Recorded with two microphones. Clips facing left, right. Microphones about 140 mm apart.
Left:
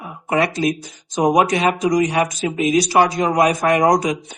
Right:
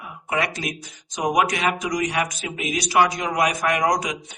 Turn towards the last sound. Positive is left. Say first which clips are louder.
# left 6 dB
turn(degrees=30)  # may be behind; listen again after turning